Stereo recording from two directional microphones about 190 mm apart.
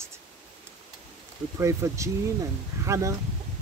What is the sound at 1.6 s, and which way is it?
Speech, 15° right (ahead or behind).